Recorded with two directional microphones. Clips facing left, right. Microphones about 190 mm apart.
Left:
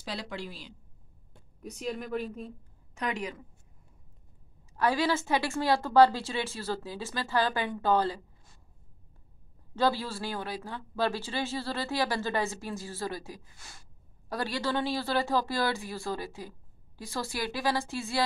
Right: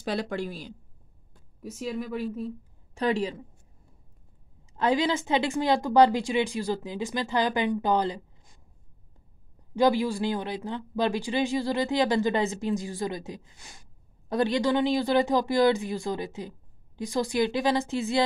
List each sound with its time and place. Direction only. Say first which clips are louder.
0.0 s speech: right 8 dB; 50° right (ahead or behind)
1.6 s speech: right 3 dB; 5° right (ahead or behind)
2.9 s a woman's voice: right 7 dB; 30° right (ahead or behind)
4.7 s speech: right 3 dB; 20° right (ahead or behind)
9.8 s speech: right 6 dB; 15° right (ahead or behind)